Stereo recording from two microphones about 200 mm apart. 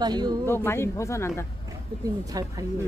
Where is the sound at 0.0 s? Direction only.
20° right (ahead or behind).